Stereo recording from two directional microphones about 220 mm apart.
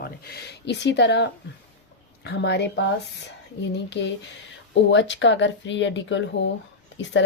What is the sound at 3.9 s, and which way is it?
Speech, 50° left (ahead or behind).